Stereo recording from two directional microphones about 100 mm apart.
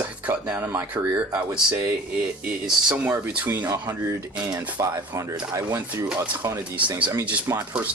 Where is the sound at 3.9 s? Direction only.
30° right (ahead or behind).